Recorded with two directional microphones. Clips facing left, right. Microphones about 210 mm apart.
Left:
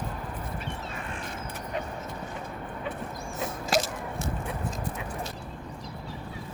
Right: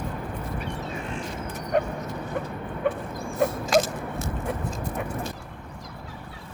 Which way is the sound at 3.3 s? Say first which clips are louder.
Right 7 dB; 50° right (ahead or behind).